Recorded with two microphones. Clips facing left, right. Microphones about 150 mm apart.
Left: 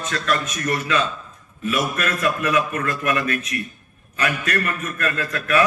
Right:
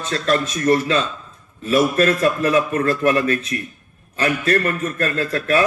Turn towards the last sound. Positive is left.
turn(degrees=-30)  # may be behind; listen again after turning